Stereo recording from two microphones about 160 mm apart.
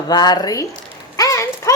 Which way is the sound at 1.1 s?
20° left (ahead or behind).